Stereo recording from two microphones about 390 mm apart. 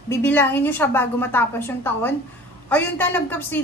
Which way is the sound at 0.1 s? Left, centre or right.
Centre.